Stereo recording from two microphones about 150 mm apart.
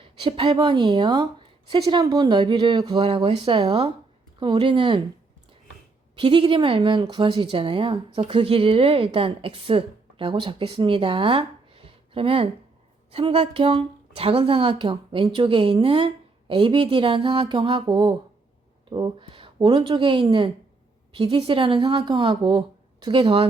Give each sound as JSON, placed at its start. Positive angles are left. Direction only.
{"t": 0.0, "sound": "speech", "side_deg": -35}
{"t": 6.1, "sound": "speech", "side_deg": -30}